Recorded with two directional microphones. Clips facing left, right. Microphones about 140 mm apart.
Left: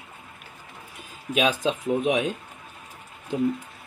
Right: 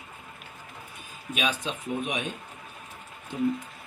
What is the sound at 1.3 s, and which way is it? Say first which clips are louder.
A man's voice: left 7 dB; 90° left.